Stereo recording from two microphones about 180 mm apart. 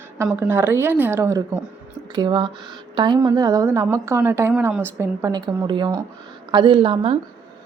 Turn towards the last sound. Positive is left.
turn(degrees=-30)  # may be behind; listen again after turning